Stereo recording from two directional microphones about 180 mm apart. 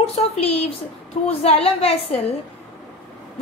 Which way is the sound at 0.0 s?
35° left (ahead or behind).